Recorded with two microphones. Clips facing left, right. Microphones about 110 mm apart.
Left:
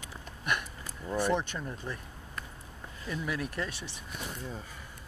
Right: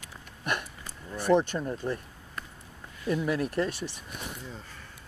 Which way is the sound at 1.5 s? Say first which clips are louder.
Right 7 dB; 25° right (ahead or behind).